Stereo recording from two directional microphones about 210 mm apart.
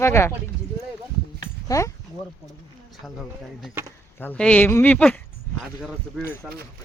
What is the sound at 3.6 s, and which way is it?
Speech, 10° right (ahead or behind).